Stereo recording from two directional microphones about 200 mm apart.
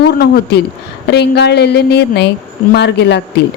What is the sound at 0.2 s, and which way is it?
Speech, 50° left (ahead or behind).